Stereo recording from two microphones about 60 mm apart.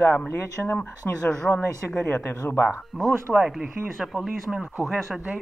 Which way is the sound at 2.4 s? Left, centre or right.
Left.